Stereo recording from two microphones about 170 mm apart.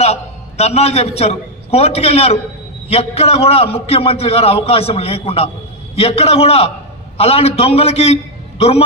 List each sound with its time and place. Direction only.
0.0 s a man's voice: 40° left (ahead or behind)